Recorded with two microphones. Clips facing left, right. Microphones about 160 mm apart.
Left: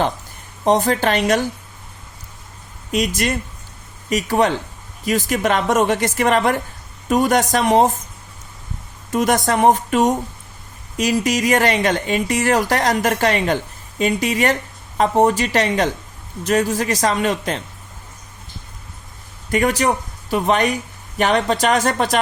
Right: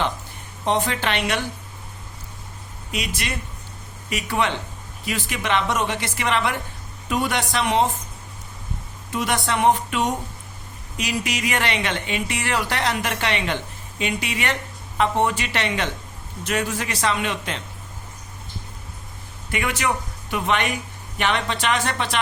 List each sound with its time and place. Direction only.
0.6 s speech: 40° left (ahead or behind)
2.9 s a woman's voice: 45° left (ahead or behind)
9.1 s a woman's voice: 45° left (ahead or behind)
19.5 s a woman's voice: 40° left (ahead or behind)